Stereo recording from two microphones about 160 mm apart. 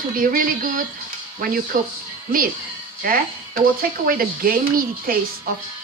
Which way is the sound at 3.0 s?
65° right (ahead or behind).